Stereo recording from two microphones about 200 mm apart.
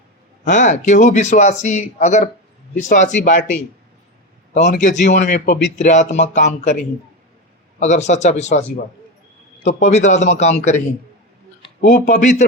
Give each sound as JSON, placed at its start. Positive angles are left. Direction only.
{"t": 0.4, "sound": "a man's voice", "side_deg": 35}
{"t": 4.6, "sound": "a man's voice", "side_deg": 40}
{"t": 7.8, "sound": "a man's voice", "side_deg": 35}
{"t": 9.6, "sound": "a man's voice", "side_deg": 35}